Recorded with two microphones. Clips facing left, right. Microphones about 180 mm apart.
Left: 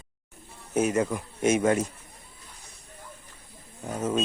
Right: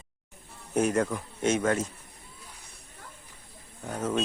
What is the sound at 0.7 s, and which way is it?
Speech, 5° left (ahead or behind).